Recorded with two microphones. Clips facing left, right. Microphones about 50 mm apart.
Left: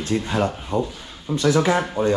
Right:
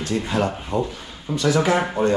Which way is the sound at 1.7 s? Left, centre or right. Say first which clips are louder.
Right 1 dB; right.